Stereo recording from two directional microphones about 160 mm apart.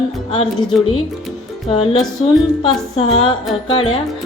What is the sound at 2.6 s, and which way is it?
A woman's voice, 35° left (ahead or behind).